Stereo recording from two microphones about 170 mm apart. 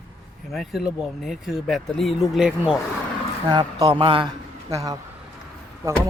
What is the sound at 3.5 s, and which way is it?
Speech, 25° right (ahead or behind).